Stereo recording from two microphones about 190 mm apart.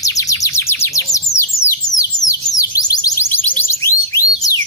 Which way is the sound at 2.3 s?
20° left (ahead or behind).